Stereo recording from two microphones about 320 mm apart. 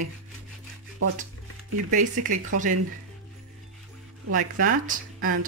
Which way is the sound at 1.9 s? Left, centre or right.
Right.